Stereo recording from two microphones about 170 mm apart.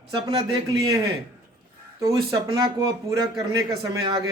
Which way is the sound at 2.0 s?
20° right (ahead or behind).